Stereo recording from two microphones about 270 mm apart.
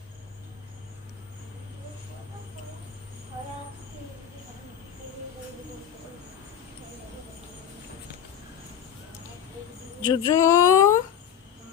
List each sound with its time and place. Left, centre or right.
10.1 s speech: centre